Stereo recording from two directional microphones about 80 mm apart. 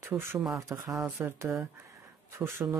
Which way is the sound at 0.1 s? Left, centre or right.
Right.